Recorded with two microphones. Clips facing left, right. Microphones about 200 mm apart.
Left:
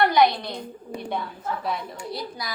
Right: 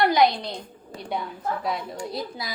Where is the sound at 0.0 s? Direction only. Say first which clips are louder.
Even; 20° right (ahead or behind).